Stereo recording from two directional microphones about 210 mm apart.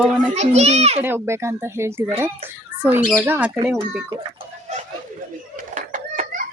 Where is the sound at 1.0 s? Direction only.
10° right (ahead or behind).